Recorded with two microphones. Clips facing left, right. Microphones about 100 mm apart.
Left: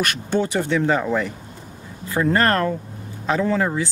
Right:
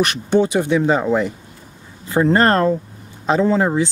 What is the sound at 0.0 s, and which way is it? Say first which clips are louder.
Speech: right 5 dB; 20° right (ahead or behind).